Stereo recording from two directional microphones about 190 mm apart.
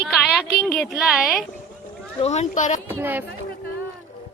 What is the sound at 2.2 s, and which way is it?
Speech, 35° left (ahead or behind).